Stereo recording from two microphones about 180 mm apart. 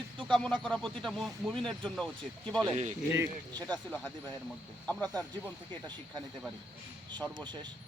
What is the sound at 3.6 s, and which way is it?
Speech, 10° left (ahead or behind).